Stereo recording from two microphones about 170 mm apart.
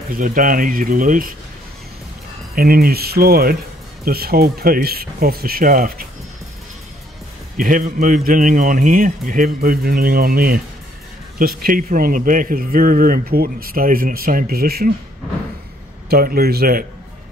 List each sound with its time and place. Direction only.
0.1 s a man's voice: 55° right (ahead or behind)
2.5 s a man's voice: 60° right (ahead or behind)
7.5 s a man's voice: 55° right (ahead or behind)
16.1 s a man's voice: 65° right (ahead or behind)